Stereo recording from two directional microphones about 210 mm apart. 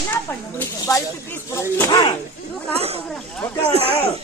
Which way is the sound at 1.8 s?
20° left (ahead or behind).